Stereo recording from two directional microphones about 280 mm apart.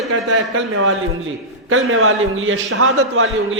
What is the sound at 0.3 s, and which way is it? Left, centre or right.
A man's voice, right.